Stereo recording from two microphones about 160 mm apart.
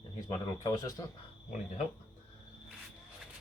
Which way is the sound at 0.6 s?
20° left (ahead or behind).